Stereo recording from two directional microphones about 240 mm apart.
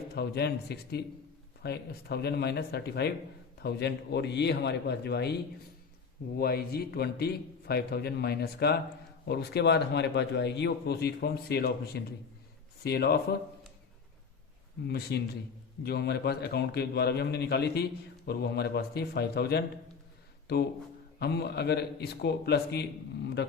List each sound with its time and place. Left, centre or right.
0.1 s a man's voice: left
14.8 s a man's voice: left
21.2 s a man's voice: left